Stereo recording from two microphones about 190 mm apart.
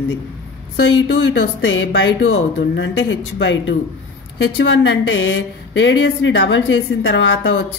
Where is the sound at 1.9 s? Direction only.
75° left (ahead or behind).